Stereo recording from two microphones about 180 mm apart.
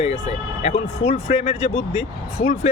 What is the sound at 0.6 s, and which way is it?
Speech, 35° left (ahead or behind).